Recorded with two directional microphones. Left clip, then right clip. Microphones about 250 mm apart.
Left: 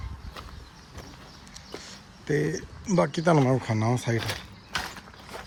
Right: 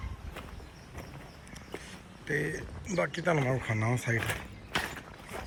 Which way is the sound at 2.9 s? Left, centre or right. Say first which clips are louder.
Left 7 dB; left.